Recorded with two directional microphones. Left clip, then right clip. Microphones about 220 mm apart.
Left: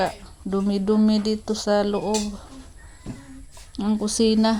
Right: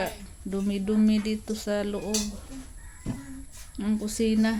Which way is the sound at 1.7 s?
15° left (ahead or behind).